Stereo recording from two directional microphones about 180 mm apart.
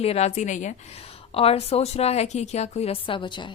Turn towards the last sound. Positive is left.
turn(degrees=25)  # may be behind; listen again after turning